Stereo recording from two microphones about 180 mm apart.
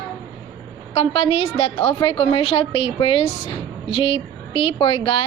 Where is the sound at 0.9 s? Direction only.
30° left (ahead or behind).